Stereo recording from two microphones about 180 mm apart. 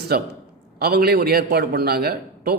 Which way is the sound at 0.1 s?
60° right (ahead or behind).